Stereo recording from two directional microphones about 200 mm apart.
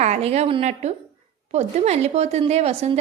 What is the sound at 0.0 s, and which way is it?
A woman's voice, 35° right (ahead or behind).